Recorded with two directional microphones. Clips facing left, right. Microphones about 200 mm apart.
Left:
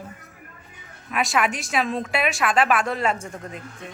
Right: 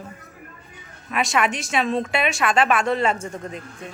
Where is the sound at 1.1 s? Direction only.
Centre (ahead or behind).